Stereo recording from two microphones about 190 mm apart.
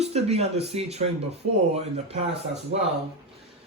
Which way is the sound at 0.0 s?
35° right (ahead or behind).